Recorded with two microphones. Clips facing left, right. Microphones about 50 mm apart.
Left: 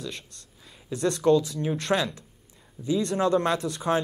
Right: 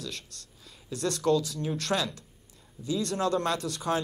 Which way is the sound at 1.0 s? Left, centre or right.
Left.